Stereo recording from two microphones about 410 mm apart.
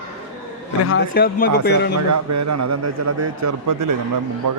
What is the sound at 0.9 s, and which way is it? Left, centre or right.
Speech, left.